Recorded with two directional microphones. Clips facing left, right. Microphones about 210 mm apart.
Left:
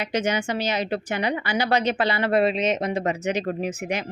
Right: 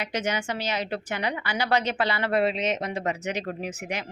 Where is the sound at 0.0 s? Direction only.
20° left (ahead or behind).